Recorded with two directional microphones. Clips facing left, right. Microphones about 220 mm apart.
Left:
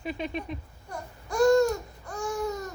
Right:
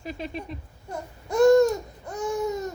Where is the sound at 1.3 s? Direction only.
20° right (ahead or behind).